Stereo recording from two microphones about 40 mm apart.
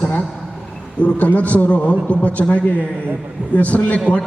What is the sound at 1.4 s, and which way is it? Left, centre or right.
A man's voice, left.